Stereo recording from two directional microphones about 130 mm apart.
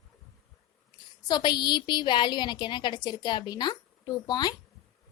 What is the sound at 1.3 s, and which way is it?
A woman's voice, 35° left (ahead or behind).